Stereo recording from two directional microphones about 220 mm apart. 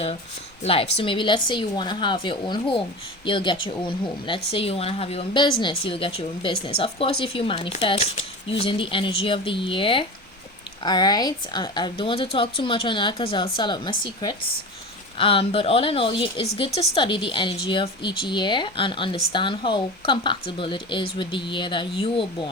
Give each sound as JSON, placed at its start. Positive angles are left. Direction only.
{"t": 0.6, "sound": "speech", "side_deg": 25}